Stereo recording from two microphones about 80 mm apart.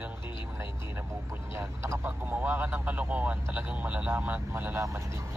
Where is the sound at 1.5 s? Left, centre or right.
Right.